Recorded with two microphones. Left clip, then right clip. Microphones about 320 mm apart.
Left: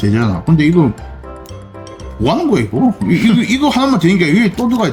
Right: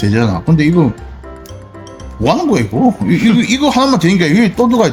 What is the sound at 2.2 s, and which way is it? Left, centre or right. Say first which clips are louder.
Speech: right 1 dB; centre.